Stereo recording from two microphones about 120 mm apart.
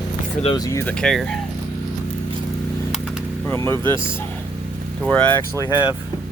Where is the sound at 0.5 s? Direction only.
30° left (ahead or behind).